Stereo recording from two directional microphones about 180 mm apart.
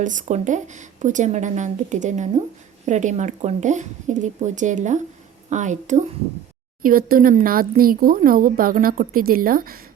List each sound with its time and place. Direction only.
0.0 s a woman's voice: 45° right (ahead or behind)
6.8 s speech: 50° right (ahead or behind)